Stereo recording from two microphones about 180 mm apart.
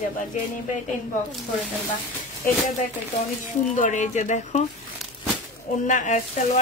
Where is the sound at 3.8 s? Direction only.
45° left (ahead or behind).